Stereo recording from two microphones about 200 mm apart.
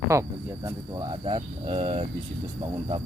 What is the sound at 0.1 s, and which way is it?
Speech, 15° right (ahead or behind).